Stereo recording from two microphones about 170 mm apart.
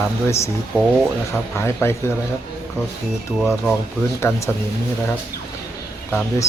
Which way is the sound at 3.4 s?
Centre (ahead or behind).